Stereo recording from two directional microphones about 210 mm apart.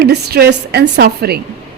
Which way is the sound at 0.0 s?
50° right (ahead or behind).